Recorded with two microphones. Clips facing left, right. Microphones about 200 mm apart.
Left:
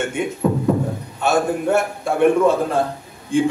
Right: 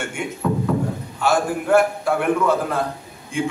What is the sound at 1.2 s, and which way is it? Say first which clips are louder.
A man's voice: left 2 dB; 25° left (ahead or behind).